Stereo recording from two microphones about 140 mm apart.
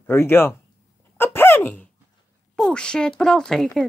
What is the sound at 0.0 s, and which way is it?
Speech, 15° left (ahead or behind).